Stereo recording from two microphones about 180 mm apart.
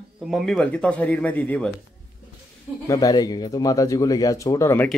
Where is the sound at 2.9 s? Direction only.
20° left (ahead or behind).